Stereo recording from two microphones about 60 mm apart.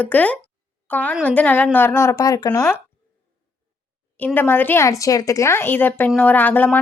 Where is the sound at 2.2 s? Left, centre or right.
Left.